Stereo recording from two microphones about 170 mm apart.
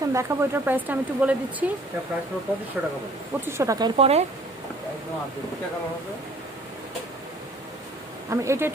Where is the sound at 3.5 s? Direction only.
15° right (ahead or behind).